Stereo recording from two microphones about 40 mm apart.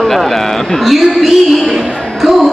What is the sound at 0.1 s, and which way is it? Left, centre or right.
A man's voice, centre.